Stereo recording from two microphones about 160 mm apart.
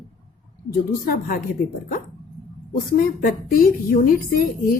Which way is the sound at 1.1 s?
65° left (ahead or behind).